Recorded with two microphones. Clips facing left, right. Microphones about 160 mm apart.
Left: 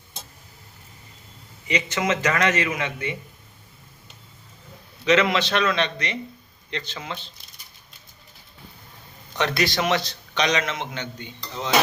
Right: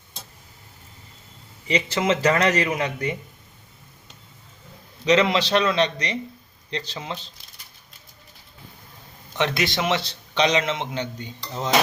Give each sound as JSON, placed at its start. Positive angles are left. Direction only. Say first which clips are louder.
{"t": 1.6, "sound": "a man's voice", "louder": "right 2 dB", "side_deg": -30}
{"t": 5.0, "sound": "a man's voice", "louder": "right 1 dB", "side_deg": -30}
{"t": 9.4, "sound": "a man's voice", "louder": "even", "side_deg": -20}